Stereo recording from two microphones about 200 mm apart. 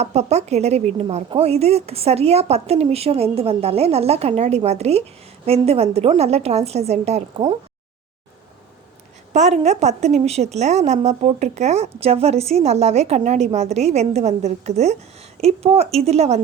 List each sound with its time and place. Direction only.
0.0 s a woman's voice: 35° right (ahead or behind)
9.3 s a woman's voice: 35° right (ahead or behind)